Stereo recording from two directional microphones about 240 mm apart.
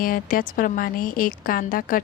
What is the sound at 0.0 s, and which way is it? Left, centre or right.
Speech, left.